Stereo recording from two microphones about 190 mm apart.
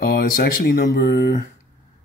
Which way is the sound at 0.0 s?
55° left (ahead or behind).